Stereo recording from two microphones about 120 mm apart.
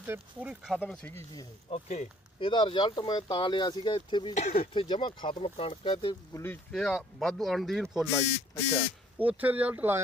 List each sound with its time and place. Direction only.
0.0 s speech: 15° right (ahead or behind)
1.7 s speech: 60° left (ahead or behind)
2.5 s speech: 40° left (ahead or behind)
4.3 s speech: 90° left
4.7 s speech: 40° left (ahead or behind)
6.3 s speech: 20° left (ahead or behind)
6.7 s speech: 5° left (ahead or behind); by 10.0 s 15° right (ahead or behind)